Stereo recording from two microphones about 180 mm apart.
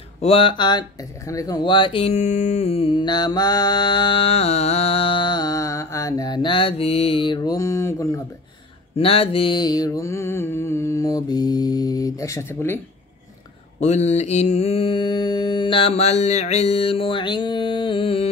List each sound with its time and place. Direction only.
0.2 s speech: 30° left (ahead or behind)
8.9 s speech: 30° left (ahead or behind); by 12.8 s 10° left (ahead or behind)
13.7 s mantra: 40° left (ahead or behind)